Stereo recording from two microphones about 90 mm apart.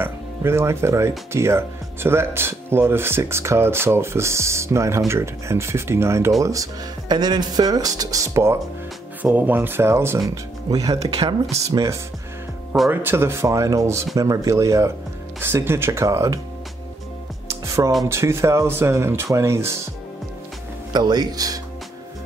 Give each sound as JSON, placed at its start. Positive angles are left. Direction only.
{"t": 0.0, "sound": "speech", "side_deg": -30}
{"t": 9.2, "sound": "speech", "side_deg": -20}
{"t": 10.3, "sound": "speech", "side_deg": -40}
{"t": 12.9, "sound": "speech", "side_deg": -25}
{"t": 17.6, "sound": "music", "side_deg": -35}
{"t": 18.0, "sound": "speech", "side_deg": -30}
{"t": 20.9, "sound": "speech", "side_deg": -50}